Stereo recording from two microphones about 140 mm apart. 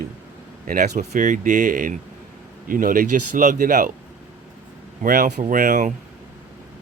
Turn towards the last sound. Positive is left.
turn(degrees=-70)  # may be behind; listen again after turning